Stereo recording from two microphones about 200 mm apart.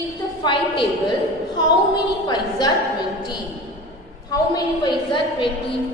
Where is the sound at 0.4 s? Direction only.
25° left (ahead or behind).